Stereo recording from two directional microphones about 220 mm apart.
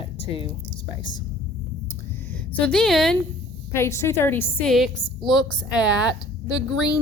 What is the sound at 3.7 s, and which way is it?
A woman's voice, 10° left (ahead or behind).